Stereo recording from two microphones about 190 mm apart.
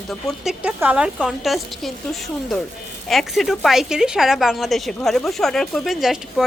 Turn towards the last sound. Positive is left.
turn(degrees=0)  # may be behind; listen again after turning